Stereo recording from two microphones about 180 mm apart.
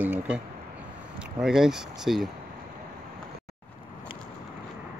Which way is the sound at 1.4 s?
5° right (ahead or behind).